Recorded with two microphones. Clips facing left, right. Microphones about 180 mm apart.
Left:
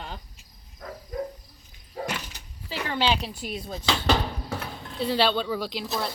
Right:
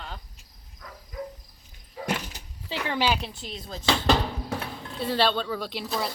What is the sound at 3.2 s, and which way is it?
Speech, 10° left (ahead or behind).